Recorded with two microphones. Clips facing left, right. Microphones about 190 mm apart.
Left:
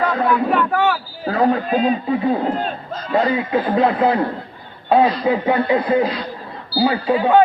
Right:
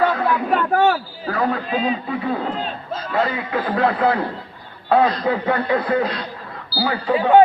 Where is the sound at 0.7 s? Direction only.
40° right (ahead or behind).